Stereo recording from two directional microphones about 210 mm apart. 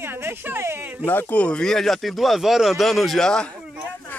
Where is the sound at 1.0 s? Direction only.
10° left (ahead or behind).